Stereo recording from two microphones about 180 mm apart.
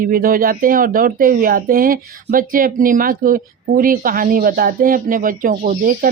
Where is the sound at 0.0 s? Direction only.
55° right (ahead or behind).